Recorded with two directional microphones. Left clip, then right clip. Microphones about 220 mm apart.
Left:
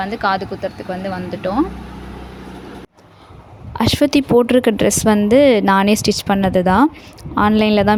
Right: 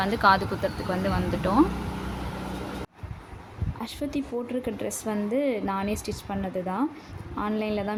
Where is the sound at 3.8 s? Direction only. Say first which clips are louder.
Left 17 dB; 45° left (ahead or behind).